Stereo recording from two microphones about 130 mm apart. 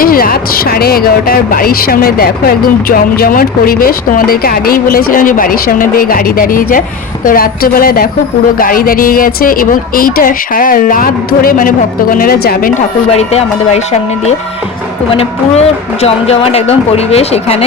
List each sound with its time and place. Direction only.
0.0 s a sound: 90° left
2.9 s speech: 90° left
13.1 s speech: 55° left (ahead or behind)
15.1 s speech: 50° left (ahead or behind)